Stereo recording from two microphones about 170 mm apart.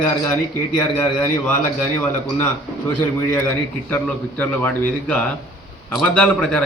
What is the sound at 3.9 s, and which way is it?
A man's voice, 10° left (ahead or behind).